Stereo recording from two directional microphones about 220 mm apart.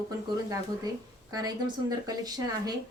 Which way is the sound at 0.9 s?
20° right (ahead or behind).